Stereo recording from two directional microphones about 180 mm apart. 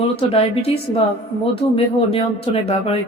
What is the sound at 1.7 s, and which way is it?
A woman's voice, 30° left (ahead or behind).